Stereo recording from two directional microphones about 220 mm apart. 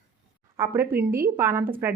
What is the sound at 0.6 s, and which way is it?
A woman's voice, 10° right (ahead or behind).